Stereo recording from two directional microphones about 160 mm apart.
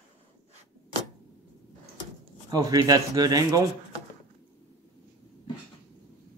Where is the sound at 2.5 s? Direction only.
25° right (ahead or behind).